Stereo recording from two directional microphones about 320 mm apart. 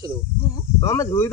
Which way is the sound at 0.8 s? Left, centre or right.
Centre.